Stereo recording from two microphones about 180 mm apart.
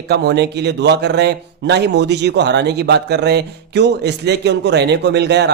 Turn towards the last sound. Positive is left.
turn(degrees=-70)  # may be behind; listen again after turning